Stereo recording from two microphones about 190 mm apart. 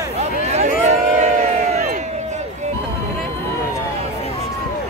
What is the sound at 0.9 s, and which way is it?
Crowd, 35° right (ahead or behind).